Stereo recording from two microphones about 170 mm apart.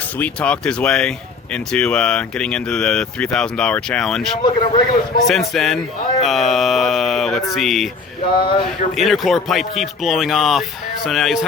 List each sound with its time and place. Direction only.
0.2 s speech: 5° left (ahead or behind)
4.4 s a man's voice: 30° left (ahead or behind)
5.2 s speech: centre (ahead or behind)
6.2 s mantra: centre (ahead or behind)
7.5 s speech: centre (ahead or behind)
8.3 s a man's voice: 30° left (ahead or behind)
8.6 s speech: centre (ahead or behind)